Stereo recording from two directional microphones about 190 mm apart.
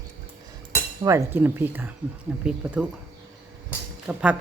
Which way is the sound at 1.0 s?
15° right (ahead or behind).